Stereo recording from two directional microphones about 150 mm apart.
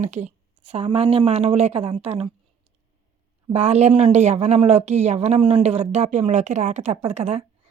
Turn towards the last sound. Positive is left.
turn(degrees=-45)  # may be behind; listen again after turning